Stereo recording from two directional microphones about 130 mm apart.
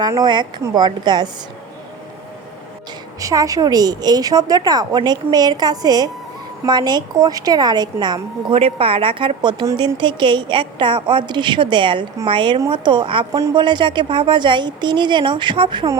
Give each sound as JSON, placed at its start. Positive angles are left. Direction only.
{"t": 0.0, "sound": "a woman's voice", "side_deg": -30}
{"t": 3.2, "sound": "a woman's voice", "side_deg": -25}
{"t": 8.5, "sound": "a woman's voice", "side_deg": -45}